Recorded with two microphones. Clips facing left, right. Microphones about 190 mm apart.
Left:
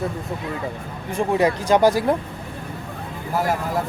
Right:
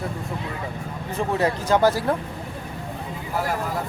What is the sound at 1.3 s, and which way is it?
Speech, 15° left (ahead or behind).